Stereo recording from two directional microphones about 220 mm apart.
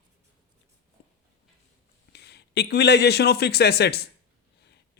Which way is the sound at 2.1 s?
50° left (ahead or behind).